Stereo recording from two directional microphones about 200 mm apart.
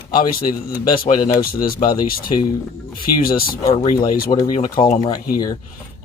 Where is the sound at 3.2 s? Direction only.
45° left (ahead or behind).